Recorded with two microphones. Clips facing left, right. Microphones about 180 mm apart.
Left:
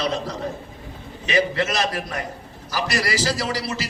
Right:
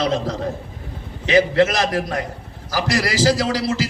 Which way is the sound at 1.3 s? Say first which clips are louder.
Right 6 dB; 90° right.